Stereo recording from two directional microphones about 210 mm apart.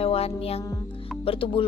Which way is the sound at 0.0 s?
30° left (ahead or behind).